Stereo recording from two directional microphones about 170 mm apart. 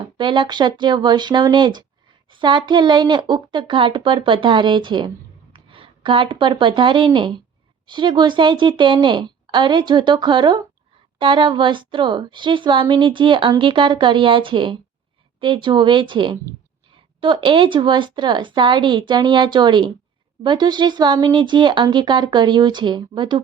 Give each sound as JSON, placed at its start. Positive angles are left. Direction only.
{"t": 0.0, "sound": "a woman's voice", "side_deg": -25}